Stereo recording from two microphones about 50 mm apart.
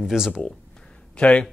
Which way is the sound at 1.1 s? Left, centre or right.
Left.